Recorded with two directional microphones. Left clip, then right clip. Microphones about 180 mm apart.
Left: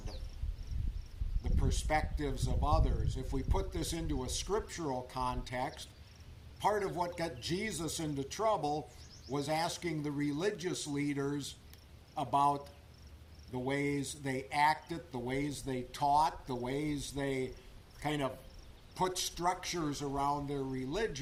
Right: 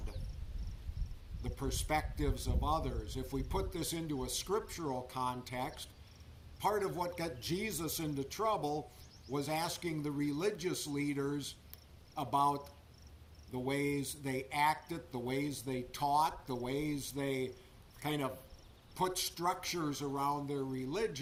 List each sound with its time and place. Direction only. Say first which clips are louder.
1.5 s a man's voice: left 1 dB; 15° right (ahead or behind)